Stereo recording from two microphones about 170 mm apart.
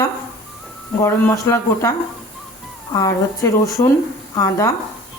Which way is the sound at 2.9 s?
20° left (ahead or behind).